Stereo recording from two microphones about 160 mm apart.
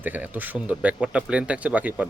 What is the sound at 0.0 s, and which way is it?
Speech, 10° right (ahead or behind).